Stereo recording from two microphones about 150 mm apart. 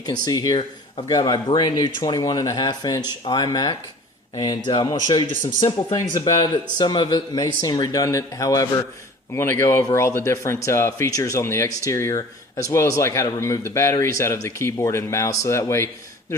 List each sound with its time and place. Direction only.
0.0 s speech: 25° left (ahead or behind)
5.4 s speech: 60° left (ahead or behind)
5.6 s speech: 30° left (ahead or behind)